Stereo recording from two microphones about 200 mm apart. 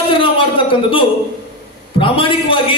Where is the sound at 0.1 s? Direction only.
25° left (ahead or behind).